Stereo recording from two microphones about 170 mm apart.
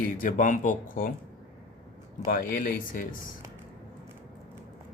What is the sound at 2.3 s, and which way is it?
Speech, 55° left (ahead or behind).